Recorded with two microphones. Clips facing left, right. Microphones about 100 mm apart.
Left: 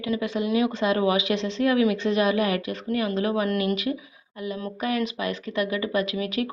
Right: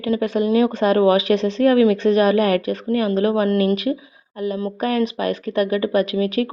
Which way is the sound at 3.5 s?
30° right (ahead or behind).